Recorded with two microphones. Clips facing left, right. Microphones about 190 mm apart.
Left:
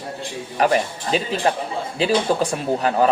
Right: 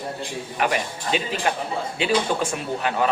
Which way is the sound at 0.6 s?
35° left (ahead or behind).